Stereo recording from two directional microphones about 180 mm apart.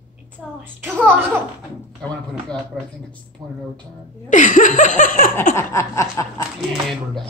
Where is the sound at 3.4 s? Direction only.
20° right (ahead or behind).